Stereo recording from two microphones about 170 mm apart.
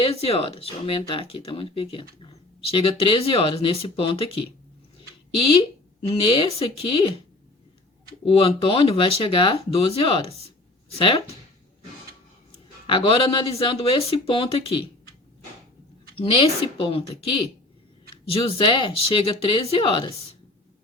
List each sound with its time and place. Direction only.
0.0 s speech: 35° left (ahead or behind)
4.9 s a sound: 30° left (ahead or behind)
6.1 s speech: 30° left (ahead or behind)
8.2 s speech: 35° left (ahead or behind)
10.2 s speech: 35° right (ahead or behind)
10.9 s speech: 30° left (ahead or behind)
12.9 s speech: 30° left (ahead or behind)
16.2 s speech: 30° left (ahead or behind)